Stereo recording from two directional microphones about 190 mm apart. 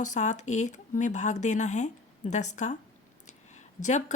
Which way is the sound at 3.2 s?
40° left (ahead or behind).